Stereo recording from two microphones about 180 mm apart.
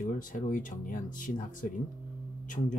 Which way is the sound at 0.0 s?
45° left (ahead or behind).